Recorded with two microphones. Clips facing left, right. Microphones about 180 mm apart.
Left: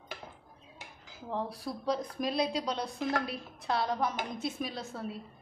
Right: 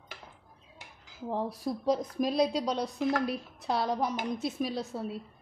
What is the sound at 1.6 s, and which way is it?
A woman's voice, 45° right (ahead or behind).